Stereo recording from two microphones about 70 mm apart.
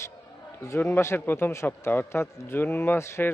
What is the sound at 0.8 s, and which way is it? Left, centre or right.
A man's voice, left.